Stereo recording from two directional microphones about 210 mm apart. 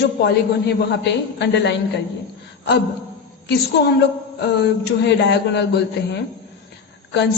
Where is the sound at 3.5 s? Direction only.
50° left (ahead or behind).